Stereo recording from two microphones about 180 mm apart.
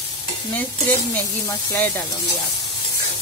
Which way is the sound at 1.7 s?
10° left (ahead or behind).